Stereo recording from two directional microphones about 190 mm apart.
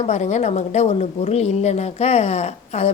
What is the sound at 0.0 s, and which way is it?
A woman's voice, 35° left (ahead or behind).